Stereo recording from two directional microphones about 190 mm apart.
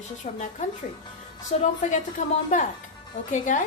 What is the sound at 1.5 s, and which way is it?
A woman's voice, 40° left (ahead or behind).